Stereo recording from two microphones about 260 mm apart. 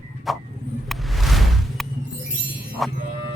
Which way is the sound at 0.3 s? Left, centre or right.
Centre.